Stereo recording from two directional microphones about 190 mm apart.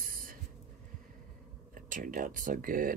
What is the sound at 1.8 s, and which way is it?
Speech, 45° right (ahead or behind).